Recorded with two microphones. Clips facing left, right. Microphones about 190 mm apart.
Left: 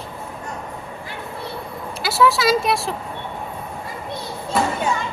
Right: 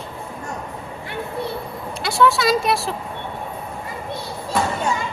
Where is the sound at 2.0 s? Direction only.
5° left (ahead or behind).